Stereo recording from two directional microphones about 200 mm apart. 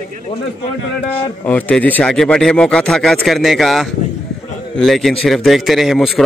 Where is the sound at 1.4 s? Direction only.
5° left (ahead or behind).